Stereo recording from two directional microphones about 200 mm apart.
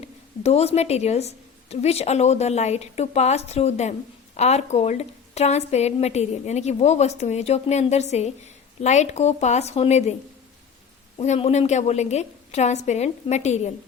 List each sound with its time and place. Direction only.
0.0 s a woman's voice: 30° left (ahead or behind)
11.2 s a woman's voice: 30° left (ahead or behind)